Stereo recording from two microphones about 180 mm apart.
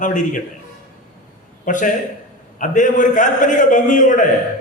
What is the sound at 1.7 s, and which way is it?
A man's voice, 45° left (ahead or behind).